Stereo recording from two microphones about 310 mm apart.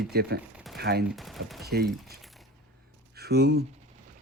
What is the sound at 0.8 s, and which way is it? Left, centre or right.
Chopping, right.